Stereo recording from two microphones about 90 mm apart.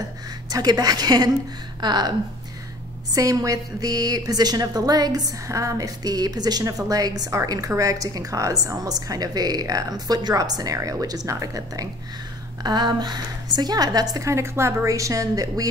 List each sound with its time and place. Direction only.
0.5 s a woman's voice: 45° right (ahead or behind)
3.1 s a woman's voice: 40° right (ahead or behind)
12.6 s a woman's voice: 55° right (ahead or behind)
14.3 s a woman's voice: 30° right (ahead or behind)